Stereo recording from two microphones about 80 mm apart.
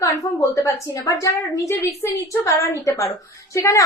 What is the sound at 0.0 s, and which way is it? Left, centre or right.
A woman's voice, left.